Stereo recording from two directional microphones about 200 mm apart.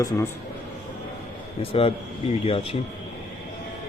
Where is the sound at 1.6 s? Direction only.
30° left (ahead or behind).